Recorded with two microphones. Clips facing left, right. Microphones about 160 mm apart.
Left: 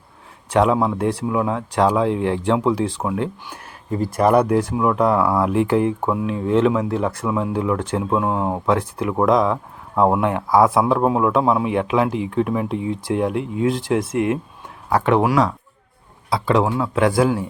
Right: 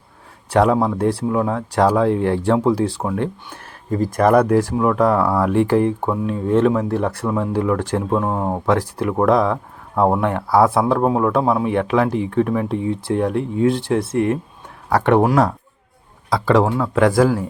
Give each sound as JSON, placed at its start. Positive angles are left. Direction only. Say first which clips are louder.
{"t": 0.5, "sound": "speech", "louder": "right 1 dB", "side_deg": -40}
{"t": 6.9, "sound": "speech", "louder": "right 1 dB", "side_deg": -60}
{"t": 10.5, "sound": "speech", "louder": "even", "side_deg": -35}
{"t": 14.8, "sound": "speech", "louder": "right 2 dB", "side_deg": -60}
{"t": 15.2, "sound": "speech", "louder": "right 2 dB", "side_deg": -45}